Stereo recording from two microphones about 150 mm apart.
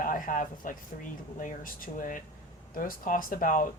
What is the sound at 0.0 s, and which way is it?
Speech, 65° left (ahead or behind).